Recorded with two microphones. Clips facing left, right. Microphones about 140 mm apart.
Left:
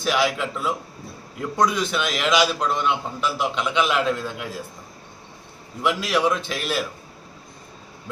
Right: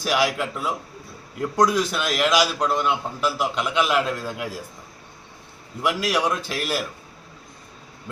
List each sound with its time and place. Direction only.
0.0 s a man's voice: 5° right (ahead or behind)
5.8 s a man's voice: 10° right (ahead or behind)